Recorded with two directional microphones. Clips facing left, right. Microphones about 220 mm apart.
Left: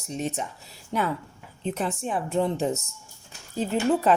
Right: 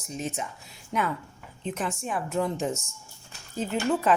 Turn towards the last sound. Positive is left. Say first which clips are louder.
# left 3 dB
turn(degrees=35)  # may be behind; listen again after turning